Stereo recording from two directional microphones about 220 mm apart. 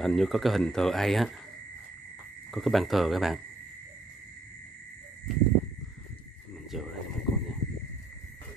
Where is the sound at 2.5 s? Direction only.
Centre (ahead or behind).